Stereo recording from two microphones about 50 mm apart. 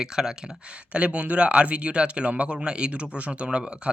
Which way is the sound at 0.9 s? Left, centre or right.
Right.